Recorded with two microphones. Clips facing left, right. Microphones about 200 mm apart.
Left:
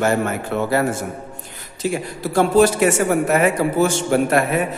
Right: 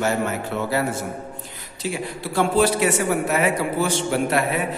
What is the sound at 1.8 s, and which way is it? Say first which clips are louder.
A man's voice: left 4 dB; 45° left (ahead or behind).